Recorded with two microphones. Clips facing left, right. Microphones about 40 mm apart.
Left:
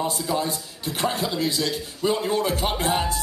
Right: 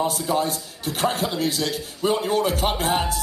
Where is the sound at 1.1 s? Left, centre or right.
Centre.